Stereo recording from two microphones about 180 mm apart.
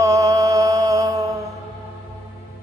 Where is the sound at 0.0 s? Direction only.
20° right (ahead or behind).